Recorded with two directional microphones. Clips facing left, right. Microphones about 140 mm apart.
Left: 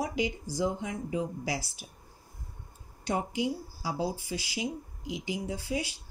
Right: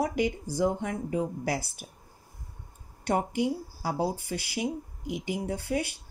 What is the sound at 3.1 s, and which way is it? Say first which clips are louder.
Speech: right 3 dB; 55° right (ahead or behind).